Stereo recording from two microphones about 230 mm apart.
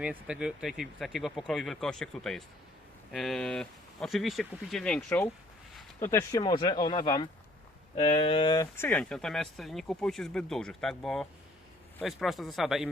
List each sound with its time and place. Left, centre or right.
0.0 s speech: centre